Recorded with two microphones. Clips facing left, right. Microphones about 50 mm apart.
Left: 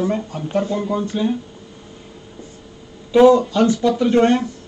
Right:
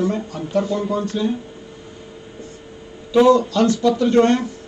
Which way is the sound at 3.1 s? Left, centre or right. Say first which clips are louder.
Left 2 dB; centre.